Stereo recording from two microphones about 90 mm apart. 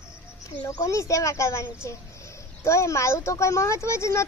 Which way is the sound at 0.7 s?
35° left (ahead or behind).